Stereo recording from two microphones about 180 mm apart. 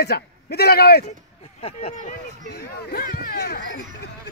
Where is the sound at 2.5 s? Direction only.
65° left (ahead or behind).